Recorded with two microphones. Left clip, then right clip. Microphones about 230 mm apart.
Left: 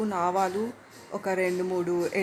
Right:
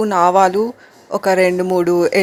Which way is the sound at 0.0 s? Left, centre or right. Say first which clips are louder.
Right 14 dB; right.